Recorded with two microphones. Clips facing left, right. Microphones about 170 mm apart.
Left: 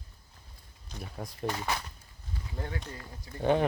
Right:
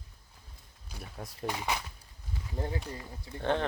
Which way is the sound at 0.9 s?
Centre (ahead or behind).